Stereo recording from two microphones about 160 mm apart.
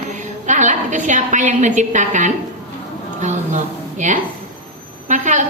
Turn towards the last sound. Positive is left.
turn(degrees=-50)  # may be behind; listen again after turning